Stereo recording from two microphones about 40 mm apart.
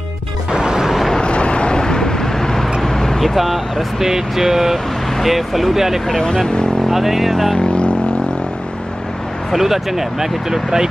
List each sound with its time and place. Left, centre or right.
0.5 s music: centre
0.8 s vehicle: centre
1.2 s vehicle: left; by 3.3 s centre
3.3 s speech: centre
6.3 s speech: centre
6.9 s speech: centre
7.5 s vehicle: left
9.5 s speech: centre